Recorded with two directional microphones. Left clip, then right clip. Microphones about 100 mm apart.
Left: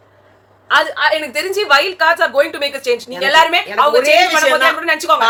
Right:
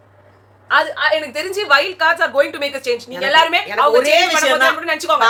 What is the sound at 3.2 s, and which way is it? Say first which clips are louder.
Speech: left 2 dB; 30° left (ahead or behind).